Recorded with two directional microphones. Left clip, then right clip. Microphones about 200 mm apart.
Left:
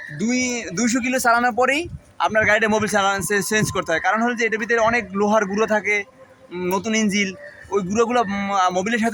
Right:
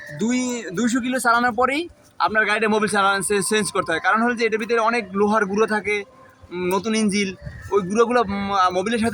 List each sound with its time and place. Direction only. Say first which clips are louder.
0.6 s a man's voice: left 1 dB; 40° left (ahead or behind)
1.0 s a man's voice: left 1 dB; 25° left (ahead or behind)